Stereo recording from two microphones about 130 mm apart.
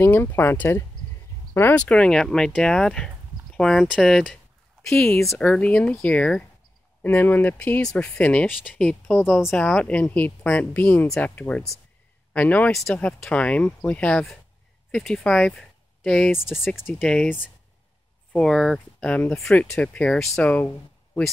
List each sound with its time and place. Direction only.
0.0 s speech: 15° left (ahead or behind)
16.6 s speech: 15° left (ahead or behind)
17.0 s speech: 5° left (ahead or behind)